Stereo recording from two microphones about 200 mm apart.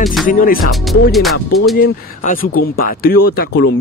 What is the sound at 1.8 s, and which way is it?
Speech, 45° left (ahead or behind).